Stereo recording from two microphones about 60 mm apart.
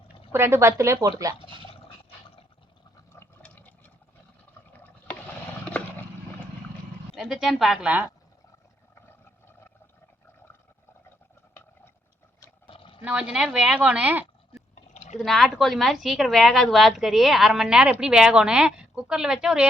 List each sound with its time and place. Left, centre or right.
0.3 s speech: right
1.0 s speech: right
3.4 s a sound: left
7.2 s speech: centre
7.9 s a woman's voice: right
13.1 s a woman's voice: right
13.3 s a woman's voice: centre; by 14.3 s right
15.2 s speech: centre